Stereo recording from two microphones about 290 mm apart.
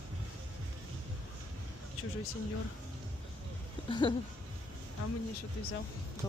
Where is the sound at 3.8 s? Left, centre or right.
Centre.